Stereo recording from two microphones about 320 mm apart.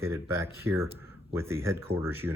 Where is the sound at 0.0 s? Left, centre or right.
Centre.